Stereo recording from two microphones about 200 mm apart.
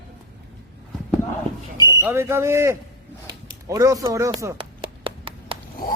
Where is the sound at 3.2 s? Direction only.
15° right (ahead or behind).